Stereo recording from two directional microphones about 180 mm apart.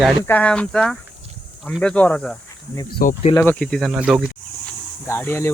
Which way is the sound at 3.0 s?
55° left (ahead or behind).